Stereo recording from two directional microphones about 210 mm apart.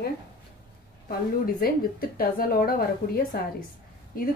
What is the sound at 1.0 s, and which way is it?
A woman's voice, 45° left (ahead or behind).